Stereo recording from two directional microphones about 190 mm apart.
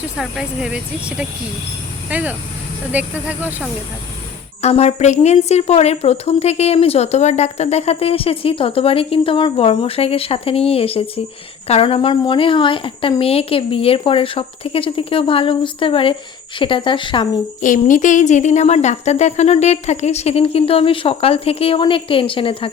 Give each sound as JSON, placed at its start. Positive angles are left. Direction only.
{"t": 0.2, "sound": "speech", "side_deg": -5}
{"t": 4.6, "sound": "a woman's voice", "side_deg": 35}
{"t": 17.6, "sound": "a woman's voice", "side_deg": 40}